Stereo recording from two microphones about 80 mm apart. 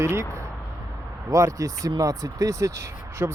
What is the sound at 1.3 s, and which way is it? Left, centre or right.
Speech, right.